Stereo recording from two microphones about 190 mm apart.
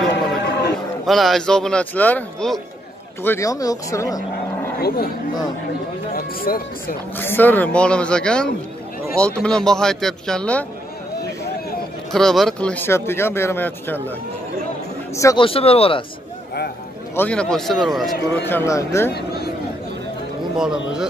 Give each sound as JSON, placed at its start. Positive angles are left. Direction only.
{"t": 0.4, "sound": "a sound", "side_deg": 60}
{"t": 1.0, "sound": "speech", "side_deg": 0}
{"t": 3.3, "sound": "speech", "side_deg": 15}
{"t": 4.8, "sound": "speech", "side_deg": 50}
{"t": 6.1, "sound": "music", "side_deg": 50}
{"t": 7.2, "sound": "speech", "side_deg": 10}
{"t": 12.1, "sound": "speech", "side_deg": 0}
{"t": 15.1, "sound": "speech", "side_deg": 15}
{"t": 15.4, "sound": "speech", "side_deg": 30}
{"t": 17.1, "sound": "speech", "side_deg": 10}
{"t": 18.5, "sound": "speech", "side_deg": 15}
{"t": 20.5, "sound": "speech", "side_deg": -5}